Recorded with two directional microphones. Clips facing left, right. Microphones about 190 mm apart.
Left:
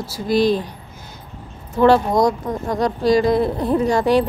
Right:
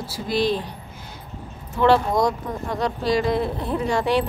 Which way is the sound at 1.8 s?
40° left (ahead or behind).